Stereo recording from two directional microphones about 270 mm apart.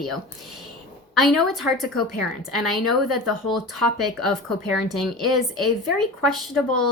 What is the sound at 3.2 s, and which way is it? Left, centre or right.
Speech, centre.